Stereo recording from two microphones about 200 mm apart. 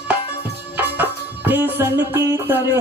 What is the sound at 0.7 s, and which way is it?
Music, 10° right (ahead or behind).